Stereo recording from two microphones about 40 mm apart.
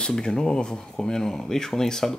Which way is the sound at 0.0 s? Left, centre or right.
Centre.